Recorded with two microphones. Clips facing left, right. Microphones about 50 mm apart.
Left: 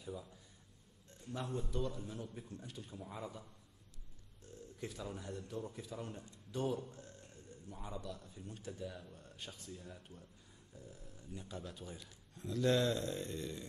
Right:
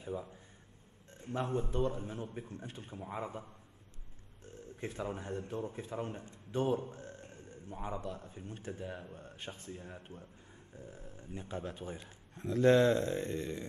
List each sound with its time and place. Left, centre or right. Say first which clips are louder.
0.0 s speech: right 6 dB; right